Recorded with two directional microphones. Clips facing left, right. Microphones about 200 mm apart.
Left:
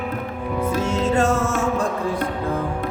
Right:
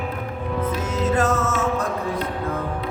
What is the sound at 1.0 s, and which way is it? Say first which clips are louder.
Music: even; 25° left (ahead or behind).